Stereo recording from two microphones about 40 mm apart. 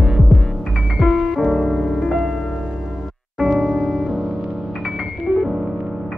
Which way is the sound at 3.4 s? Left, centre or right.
Centre.